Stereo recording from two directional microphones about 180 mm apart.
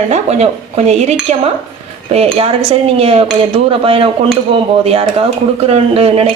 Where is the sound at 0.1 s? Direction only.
35° right (ahead or behind).